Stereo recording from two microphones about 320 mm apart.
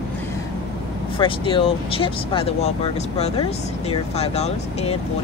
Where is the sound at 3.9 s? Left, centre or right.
Centre.